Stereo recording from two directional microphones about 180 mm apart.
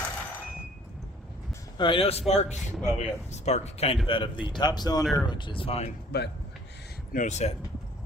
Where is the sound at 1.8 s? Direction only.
30° left (ahead or behind).